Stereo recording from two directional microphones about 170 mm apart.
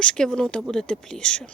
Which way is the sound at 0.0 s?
5° left (ahead or behind).